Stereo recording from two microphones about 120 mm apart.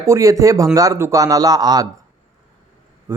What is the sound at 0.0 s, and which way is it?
A man's voice, 25° right (ahead or behind).